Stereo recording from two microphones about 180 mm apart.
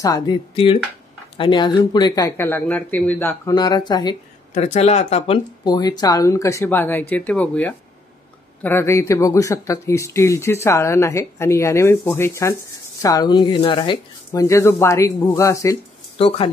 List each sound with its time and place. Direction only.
0.0 s speech: 25° left (ahead or behind)
3.5 s speech: 25° left (ahead or behind)
4.6 s speech: 35° left (ahead or behind); by 15.8 s 15° left (ahead or behind)
16.2 s speech: 30° left (ahead or behind)